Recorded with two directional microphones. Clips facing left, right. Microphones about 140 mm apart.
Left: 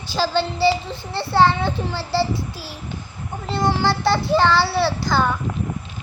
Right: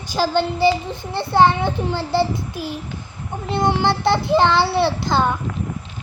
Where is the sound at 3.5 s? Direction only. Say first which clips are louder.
Right 2 dB; 20° right (ahead or behind).